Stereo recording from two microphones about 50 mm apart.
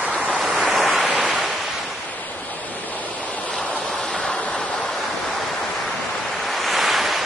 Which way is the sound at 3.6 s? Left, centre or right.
Centre.